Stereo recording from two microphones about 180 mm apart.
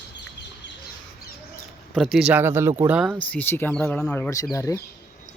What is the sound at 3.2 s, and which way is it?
Speech, 10° left (ahead or behind).